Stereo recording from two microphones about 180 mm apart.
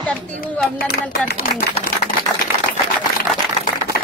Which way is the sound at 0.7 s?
60° left (ahead or behind).